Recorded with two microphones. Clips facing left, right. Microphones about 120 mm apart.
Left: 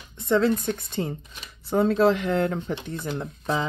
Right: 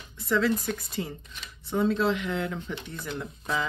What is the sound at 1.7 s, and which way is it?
Speech, 55° left (ahead or behind).